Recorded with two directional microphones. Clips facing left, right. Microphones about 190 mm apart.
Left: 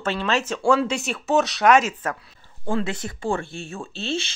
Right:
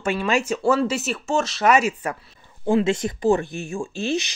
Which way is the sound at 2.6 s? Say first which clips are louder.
Right 6 dB; 20° right (ahead or behind).